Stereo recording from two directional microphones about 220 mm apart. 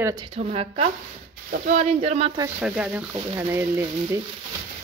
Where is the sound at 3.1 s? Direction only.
15° right (ahead or behind).